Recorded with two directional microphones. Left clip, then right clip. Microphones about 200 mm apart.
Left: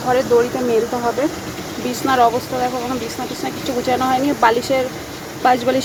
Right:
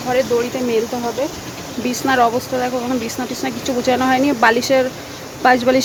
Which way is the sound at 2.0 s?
25° right (ahead or behind).